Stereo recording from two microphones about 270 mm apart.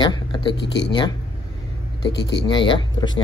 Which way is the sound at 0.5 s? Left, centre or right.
Left.